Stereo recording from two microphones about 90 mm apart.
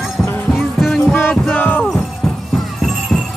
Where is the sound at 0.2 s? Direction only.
30° left (ahead or behind).